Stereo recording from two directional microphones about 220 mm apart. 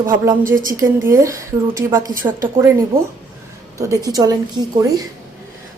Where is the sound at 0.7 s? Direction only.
15° right (ahead or behind).